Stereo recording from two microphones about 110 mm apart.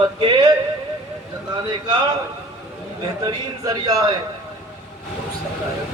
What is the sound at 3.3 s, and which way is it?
Speech, 35° right (ahead or behind).